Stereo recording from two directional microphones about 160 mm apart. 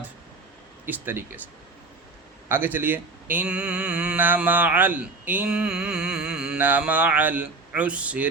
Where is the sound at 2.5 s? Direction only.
10° right (ahead or behind).